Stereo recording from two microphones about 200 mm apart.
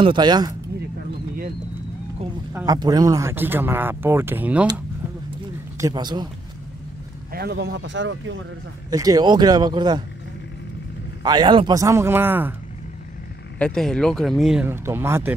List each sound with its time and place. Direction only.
0.0 s speech: 25° right (ahead or behind)
2.5 s speech: 20° right (ahead or behind)
5.8 s speech: 20° right (ahead or behind)
7.3 s speech: 55° right (ahead or behind)
8.9 s speech: 20° right (ahead or behind)
11.2 s speech: 20° right (ahead or behind)
13.6 s speech: 5° left (ahead or behind); by 15.3 s 10° right (ahead or behind)